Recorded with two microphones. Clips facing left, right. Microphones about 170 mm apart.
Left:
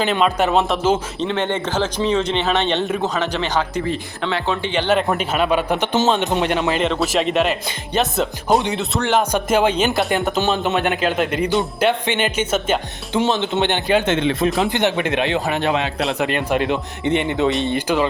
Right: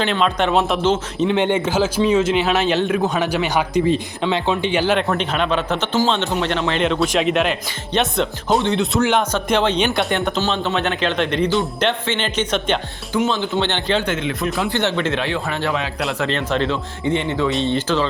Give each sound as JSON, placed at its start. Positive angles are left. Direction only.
{"t": 0.0, "sound": "a man's voice", "side_deg": 5}
{"t": 1.2, "sound": "a man's voice", "side_deg": -10}
{"t": 3.2, "sound": "a man's voice", "side_deg": -10}
{"t": 4.8, "sound": "a man's voice", "side_deg": 0}
{"t": 13.1, "sound": "speech", "side_deg": 25}
{"t": 14.1, "sound": "a man's voice", "side_deg": 30}